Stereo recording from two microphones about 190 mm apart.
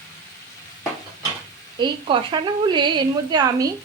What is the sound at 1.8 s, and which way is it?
Speech, 25° right (ahead or behind).